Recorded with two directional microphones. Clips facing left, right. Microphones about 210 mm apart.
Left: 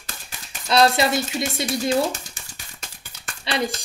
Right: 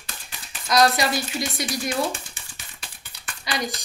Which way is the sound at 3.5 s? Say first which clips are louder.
Left 4 dB; 30° left (ahead or behind).